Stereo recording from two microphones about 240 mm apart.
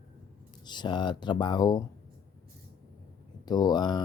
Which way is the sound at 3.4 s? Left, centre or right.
Centre.